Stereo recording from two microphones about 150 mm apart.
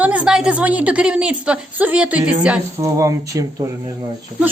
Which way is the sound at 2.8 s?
20° right (ahead or behind).